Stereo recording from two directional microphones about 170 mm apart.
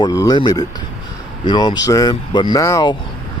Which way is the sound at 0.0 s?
20° left (ahead or behind).